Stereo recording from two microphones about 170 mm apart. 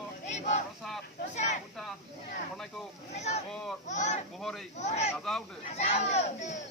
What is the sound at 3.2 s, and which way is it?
Speech, 40° left (ahead or behind).